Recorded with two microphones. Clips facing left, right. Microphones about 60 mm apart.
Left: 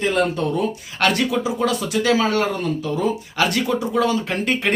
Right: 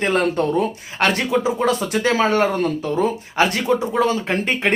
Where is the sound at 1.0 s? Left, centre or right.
Right.